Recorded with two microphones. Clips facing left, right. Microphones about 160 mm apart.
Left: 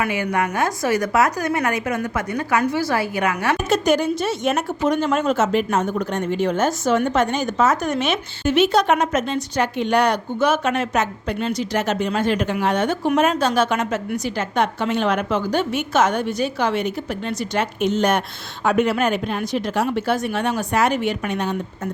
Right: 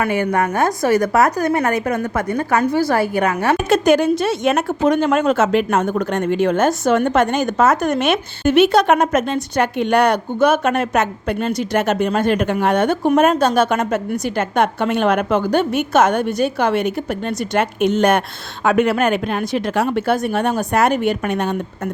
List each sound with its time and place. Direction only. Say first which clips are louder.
0.0 s a woman's voice: right 4 dB; 50° right (ahead or behind)
4.5 s speech: right 4 dB; 60° right (ahead or behind)